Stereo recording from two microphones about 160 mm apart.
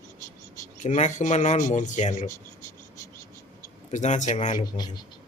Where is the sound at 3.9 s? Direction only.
50° left (ahead or behind).